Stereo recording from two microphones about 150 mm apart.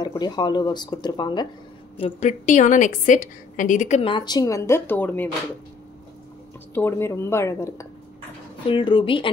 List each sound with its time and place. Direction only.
0.0 s speech: 25° left (ahead or behind)
2.0 s a woman's voice: 45° left (ahead or behind)
4.0 s speech: 30° left (ahead or behind); by 5.3 s 10° left (ahead or behind)
6.7 s speech: 15° left (ahead or behind)
8.6 s a woman's voice: 35° left (ahead or behind)